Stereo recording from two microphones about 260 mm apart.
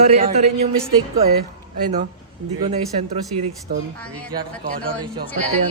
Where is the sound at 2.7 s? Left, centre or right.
Right.